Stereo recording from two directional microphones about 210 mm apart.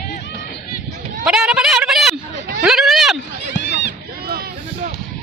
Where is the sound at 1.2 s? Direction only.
5° right (ahead or behind).